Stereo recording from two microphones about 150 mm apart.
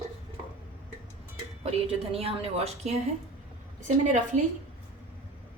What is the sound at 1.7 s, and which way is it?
A woman's voice, 40° right (ahead or behind).